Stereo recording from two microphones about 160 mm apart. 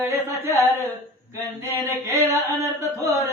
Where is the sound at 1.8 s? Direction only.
20° right (ahead or behind).